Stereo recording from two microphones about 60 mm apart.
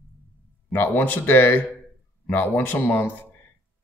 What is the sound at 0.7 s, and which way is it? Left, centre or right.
A man's voice, left.